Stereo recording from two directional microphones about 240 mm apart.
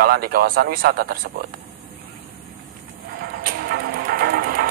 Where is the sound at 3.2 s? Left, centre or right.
Right.